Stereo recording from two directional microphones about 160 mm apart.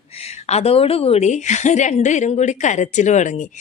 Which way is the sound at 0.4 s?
40° left (ahead or behind).